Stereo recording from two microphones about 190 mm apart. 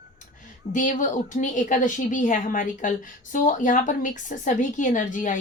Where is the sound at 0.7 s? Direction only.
40° left (ahead or behind).